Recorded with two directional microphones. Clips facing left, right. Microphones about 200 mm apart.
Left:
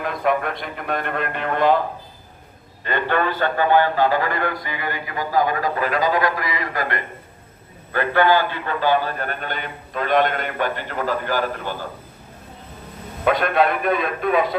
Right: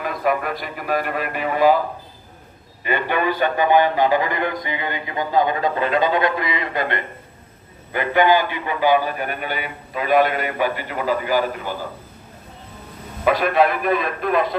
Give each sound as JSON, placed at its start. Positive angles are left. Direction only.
{"t": 0.0, "sound": "a man's voice", "side_deg": 0}
{"t": 2.8, "sound": "a man's voice", "side_deg": -10}
{"t": 13.2, "sound": "a man's voice", "side_deg": 0}